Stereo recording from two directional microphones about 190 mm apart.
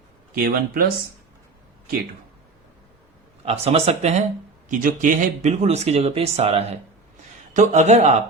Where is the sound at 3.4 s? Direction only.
35° right (ahead or behind).